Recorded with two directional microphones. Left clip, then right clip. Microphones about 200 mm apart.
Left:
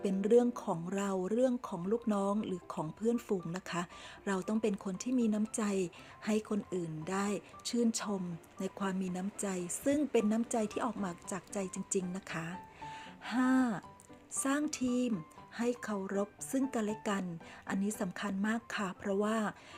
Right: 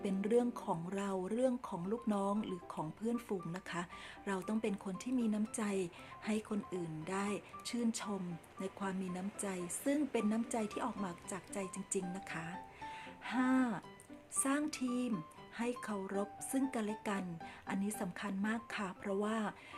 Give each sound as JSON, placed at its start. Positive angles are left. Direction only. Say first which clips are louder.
{"t": 0.0, "sound": "speech", "louder": "left 6 dB", "side_deg": 20}